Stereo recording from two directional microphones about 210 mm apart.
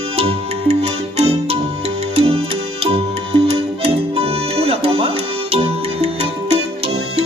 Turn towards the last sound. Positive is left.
turn(degrees=-30)  # may be behind; listen again after turning